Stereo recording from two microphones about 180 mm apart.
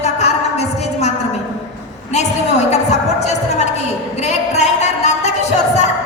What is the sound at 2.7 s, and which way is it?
Music, 40° left (ahead or behind).